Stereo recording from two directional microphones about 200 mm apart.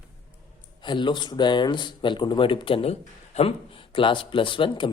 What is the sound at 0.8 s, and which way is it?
Speech, 25° left (ahead or behind).